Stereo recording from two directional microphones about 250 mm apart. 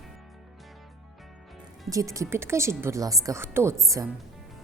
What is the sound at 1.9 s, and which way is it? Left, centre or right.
A woman's voice, centre.